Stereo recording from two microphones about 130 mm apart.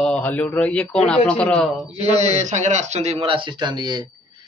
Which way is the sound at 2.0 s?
55° right (ahead or behind).